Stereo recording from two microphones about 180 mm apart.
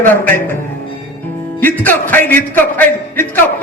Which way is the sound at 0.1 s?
10° left (ahead or behind).